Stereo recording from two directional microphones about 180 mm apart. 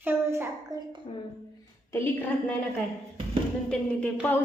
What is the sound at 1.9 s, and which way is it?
Speech, 15° left (ahead or behind).